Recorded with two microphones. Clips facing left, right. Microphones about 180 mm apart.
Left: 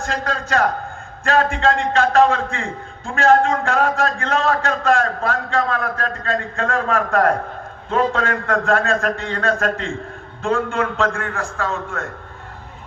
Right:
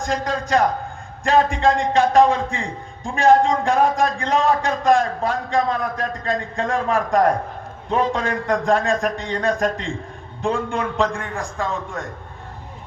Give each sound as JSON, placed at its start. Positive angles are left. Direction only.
{"t": 0.0, "sound": "a man's voice", "side_deg": -15}